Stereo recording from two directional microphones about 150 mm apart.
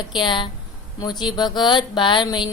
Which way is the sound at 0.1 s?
30° left (ahead or behind).